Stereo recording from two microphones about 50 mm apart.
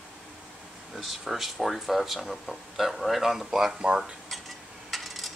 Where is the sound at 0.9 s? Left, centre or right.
Centre.